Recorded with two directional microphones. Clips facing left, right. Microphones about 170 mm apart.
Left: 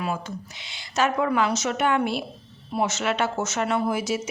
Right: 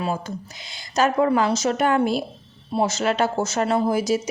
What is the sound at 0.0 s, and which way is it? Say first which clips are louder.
A woman's voice: right 3 dB; 35° right (ahead or behind).